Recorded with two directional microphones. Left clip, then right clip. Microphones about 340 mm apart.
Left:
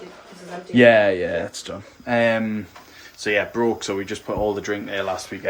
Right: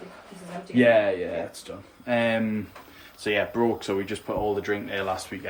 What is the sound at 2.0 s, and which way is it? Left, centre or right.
Speech, centre.